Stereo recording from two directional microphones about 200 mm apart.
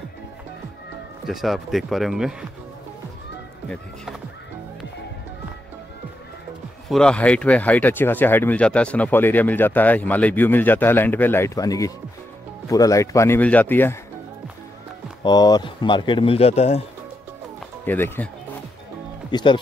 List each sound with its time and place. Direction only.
1.2 s speech: centre (ahead or behind)
6.9 s speech: 5° left (ahead or behind)
15.2 s speech: 20° left (ahead or behind)
17.8 s speech: 10° left (ahead or behind)
19.3 s speech: 25° left (ahead or behind)